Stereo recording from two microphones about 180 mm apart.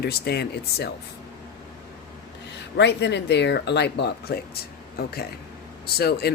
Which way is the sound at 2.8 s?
70° left (ahead or behind).